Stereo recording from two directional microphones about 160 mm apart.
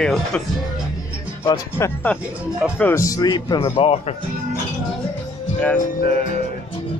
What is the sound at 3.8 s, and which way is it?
Speech, 40° left (ahead or behind).